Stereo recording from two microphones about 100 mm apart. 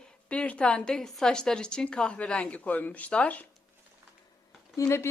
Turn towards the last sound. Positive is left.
turn(degrees=25)  # may be behind; listen again after turning